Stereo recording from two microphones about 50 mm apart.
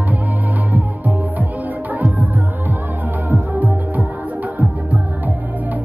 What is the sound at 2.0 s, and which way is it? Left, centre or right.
Music, right.